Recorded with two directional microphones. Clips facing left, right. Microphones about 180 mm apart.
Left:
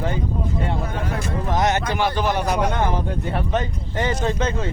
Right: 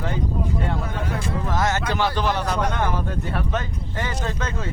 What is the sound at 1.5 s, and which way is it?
Speech, 20° left (ahead or behind).